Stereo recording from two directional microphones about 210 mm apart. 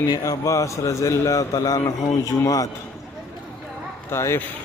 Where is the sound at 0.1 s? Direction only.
15° left (ahead or behind).